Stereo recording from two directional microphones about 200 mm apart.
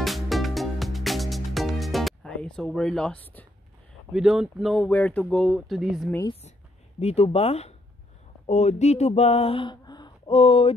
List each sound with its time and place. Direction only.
0.0 s music: centre (ahead or behind)
4.1 s speech: centre (ahead or behind)
7.0 s speech: 30° left (ahead or behind)
8.5 s a sound: 35° left (ahead or behind)